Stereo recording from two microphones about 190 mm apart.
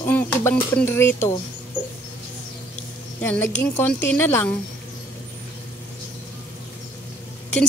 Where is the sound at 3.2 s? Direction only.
10° left (ahead or behind).